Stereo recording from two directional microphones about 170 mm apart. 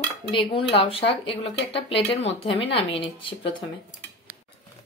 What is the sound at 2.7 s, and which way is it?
Speech, 30° left (ahead or behind).